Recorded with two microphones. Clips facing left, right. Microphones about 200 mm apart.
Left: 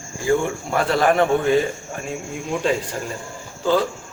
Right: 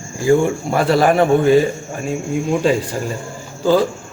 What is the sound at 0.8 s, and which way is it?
Speech, 10° right (ahead or behind).